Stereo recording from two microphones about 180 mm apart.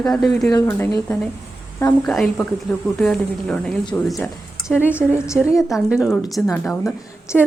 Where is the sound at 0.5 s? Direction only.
15° left (ahead or behind); by 6.1 s 5° right (ahead or behind).